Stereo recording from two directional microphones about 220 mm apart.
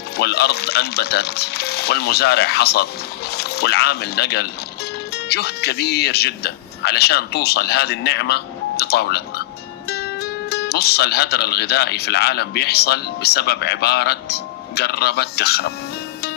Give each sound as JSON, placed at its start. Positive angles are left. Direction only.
{"t": 0.2, "sound": "speech", "side_deg": 45}